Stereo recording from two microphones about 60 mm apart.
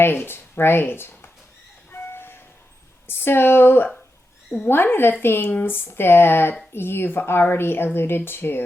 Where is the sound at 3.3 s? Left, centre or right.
Left.